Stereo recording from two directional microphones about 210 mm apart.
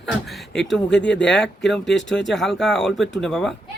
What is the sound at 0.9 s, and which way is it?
Speech, 55° left (ahead or behind).